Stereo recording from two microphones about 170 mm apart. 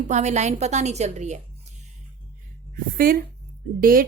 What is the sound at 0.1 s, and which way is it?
A woman's voice, 40° right (ahead or behind).